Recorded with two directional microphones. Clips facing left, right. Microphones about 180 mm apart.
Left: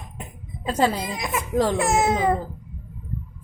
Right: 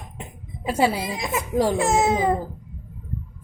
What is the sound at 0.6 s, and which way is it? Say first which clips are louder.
A woman's voice: right 1 dB; 10° right (ahead or behind).